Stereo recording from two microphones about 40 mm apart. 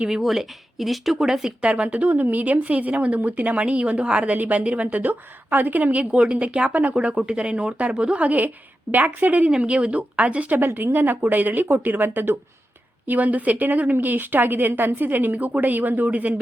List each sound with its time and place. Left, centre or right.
0.1 s speech: centre
1.6 s speech: right
1.9 s speech: right
6.1 s speech: right
9.5 s speech: right
10.6 s a woman's voice: right
13.1 s a woman's voice: right